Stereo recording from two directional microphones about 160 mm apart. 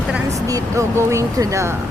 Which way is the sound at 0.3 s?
20° right (ahead or behind).